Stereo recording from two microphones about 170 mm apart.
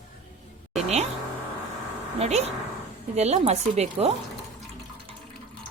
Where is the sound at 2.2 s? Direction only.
40° right (ahead or behind).